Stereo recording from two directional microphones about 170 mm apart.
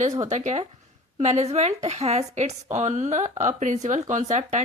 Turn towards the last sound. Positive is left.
turn(degrees=-45)  # may be behind; listen again after turning